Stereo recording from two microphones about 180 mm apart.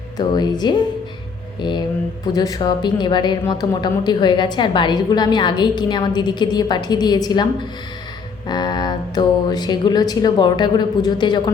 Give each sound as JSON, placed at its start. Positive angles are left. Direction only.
{"t": 0.2, "sound": "a woman's voice", "side_deg": 25}
{"t": 2.2, "sound": "a woman's voice", "side_deg": 20}
{"t": 8.4, "sound": "a woman's voice", "side_deg": 25}